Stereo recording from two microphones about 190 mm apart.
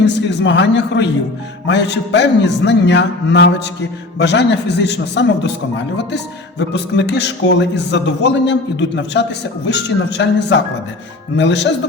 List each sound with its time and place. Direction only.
0.0 s a man's voice: 65° left (ahead or behind)
1.6 s music: 65° left (ahead or behind)
4.2 s a man's voice: 65° left (ahead or behind)